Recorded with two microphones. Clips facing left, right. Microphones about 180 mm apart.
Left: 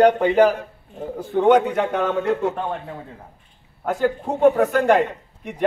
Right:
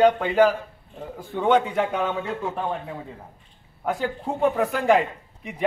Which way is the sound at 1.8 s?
75° left (ahead or behind).